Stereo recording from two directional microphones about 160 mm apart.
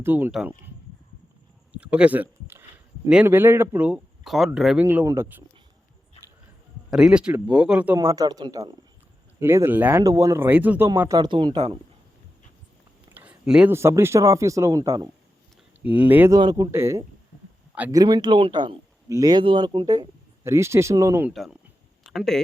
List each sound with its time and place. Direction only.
0.0 s speech: 10° right (ahead or behind)
1.7 s a sound: 10° right (ahead or behind)
3.1 s speech: 10° right (ahead or behind)
4.9 s speech: 15° right (ahead or behind)
6.9 s speech: 5° right (ahead or behind)
7.9 s speech: 20° right (ahead or behind)
9.4 s speech: 15° right (ahead or behind)
11.2 s speech: 30° right (ahead or behind)
13.1 s a sound: 10° right (ahead or behind)
13.7 s speech: 15° right (ahead or behind)
15.8 s speech: 10° right (ahead or behind)
16.4 s speech: 25° right (ahead or behind)
21.3 s speech: centre (ahead or behind)
22.0 s a sound: centre (ahead or behind)